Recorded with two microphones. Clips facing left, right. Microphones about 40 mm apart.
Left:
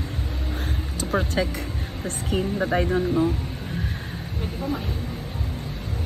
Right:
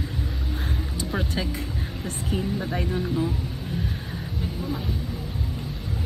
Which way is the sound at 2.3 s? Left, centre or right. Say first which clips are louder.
Left 5 dB; left.